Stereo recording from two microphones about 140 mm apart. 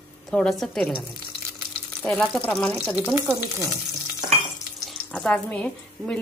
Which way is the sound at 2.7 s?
10° right (ahead or behind).